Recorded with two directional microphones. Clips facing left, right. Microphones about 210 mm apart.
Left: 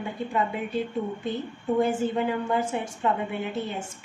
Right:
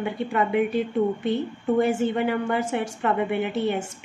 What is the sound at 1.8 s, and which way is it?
A woman's voice, 75° right (ahead or behind).